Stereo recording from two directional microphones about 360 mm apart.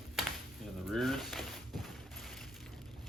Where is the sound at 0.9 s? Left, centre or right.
Centre.